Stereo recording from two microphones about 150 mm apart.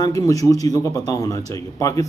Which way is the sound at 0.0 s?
25° left (ahead or behind).